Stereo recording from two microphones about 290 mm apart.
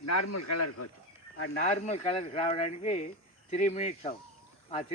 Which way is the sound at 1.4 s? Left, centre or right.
Left.